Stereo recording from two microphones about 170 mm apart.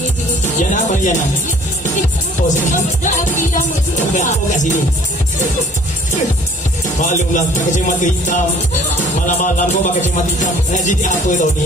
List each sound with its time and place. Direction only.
0.6 s speech: 45° left (ahead or behind)
2.7 s music: 50° left (ahead or behind)
7.0 s music: 45° left (ahead or behind)